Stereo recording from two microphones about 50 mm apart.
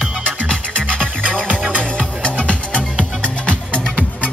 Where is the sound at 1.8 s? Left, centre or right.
Left.